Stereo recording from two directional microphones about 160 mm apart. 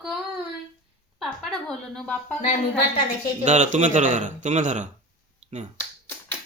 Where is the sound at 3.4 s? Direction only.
50° right (ahead or behind).